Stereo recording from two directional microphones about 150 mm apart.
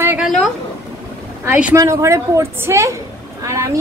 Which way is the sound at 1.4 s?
15° right (ahead or behind).